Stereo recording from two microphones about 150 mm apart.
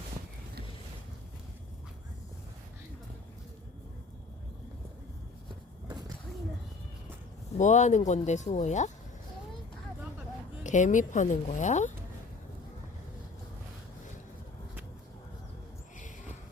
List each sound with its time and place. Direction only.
7.6 s speech: 50° left (ahead or behind)
10.6 s speech: 55° left (ahead or behind)